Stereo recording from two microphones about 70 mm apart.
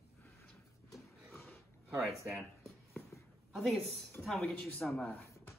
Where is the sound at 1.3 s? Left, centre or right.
Left.